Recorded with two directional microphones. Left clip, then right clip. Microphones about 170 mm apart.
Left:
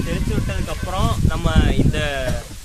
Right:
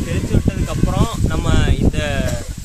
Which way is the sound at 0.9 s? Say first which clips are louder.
Left 2 dB; 5° right (ahead or behind).